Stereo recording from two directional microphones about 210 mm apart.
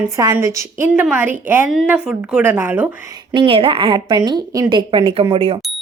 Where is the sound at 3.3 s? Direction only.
25° right (ahead or behind).